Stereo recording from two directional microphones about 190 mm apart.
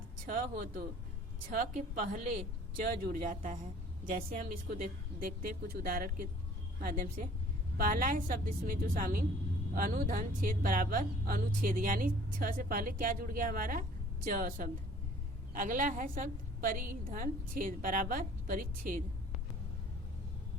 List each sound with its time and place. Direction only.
0.3 s a woman's voice: 50° right (ahead or behind)